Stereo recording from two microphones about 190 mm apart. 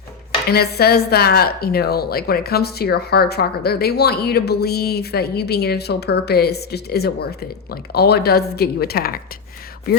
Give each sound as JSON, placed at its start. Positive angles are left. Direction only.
{"t": 0.5, "sound": "a woman's voice", "side_deg": 55}